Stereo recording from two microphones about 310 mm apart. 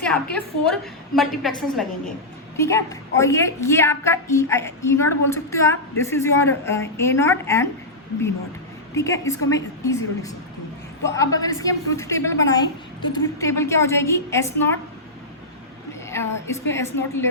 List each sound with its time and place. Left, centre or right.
0.0 s a woman's voice: centre
9.0 s a woman's voice: centre
16.0 s a woman's voice: centre